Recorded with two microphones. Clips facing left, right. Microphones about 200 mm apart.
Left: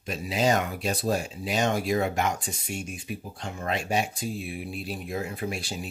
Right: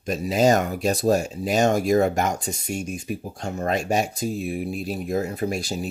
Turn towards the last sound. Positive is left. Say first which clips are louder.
# right 6 dB
turn(degrees=-40)  # may be behind; listen again after turning